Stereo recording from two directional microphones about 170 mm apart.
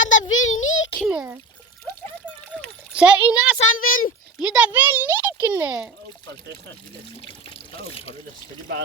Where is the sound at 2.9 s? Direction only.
5° right (ahead or behind).